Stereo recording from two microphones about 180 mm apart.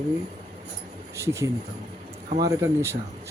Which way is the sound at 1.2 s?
15° right (ahead or behind).